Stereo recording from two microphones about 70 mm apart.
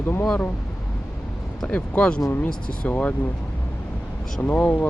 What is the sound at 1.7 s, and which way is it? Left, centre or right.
Speech, centre.